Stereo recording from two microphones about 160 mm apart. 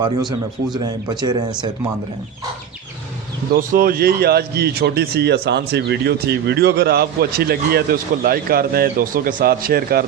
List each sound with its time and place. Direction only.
0.3 s speech: 25° right (ahead or behind)
3.5 s a man's voice: 60° right (ahead or behind)